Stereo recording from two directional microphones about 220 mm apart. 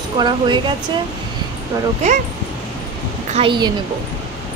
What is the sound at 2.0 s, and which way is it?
Speech, 30° right (ahead or behind).